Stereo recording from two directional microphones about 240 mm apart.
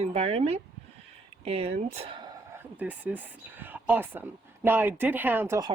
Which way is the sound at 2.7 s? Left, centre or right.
Centre.